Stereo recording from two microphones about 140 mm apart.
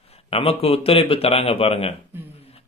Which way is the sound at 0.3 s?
45° left (ahead or behind).